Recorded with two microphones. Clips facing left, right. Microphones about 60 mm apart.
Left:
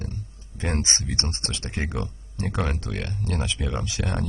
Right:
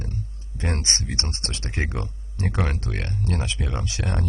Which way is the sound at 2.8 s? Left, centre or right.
Right.